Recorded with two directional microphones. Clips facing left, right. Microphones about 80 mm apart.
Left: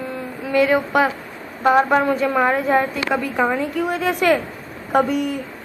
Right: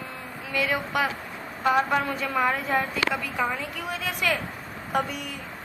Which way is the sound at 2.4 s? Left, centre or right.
Left.